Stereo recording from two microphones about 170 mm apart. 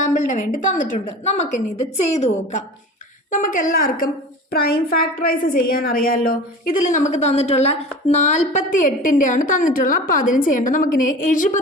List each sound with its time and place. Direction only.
0.0 s a woman's voice: 45° left (ahead or behind)